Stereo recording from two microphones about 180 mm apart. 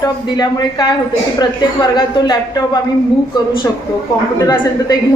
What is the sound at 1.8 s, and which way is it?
Speech, 25° left (ahead or behind).